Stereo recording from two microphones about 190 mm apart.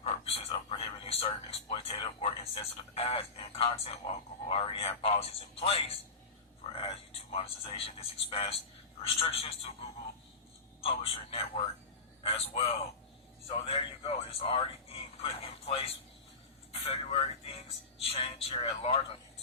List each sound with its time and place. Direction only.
0.1 s speech: 30° left (ahead or behind)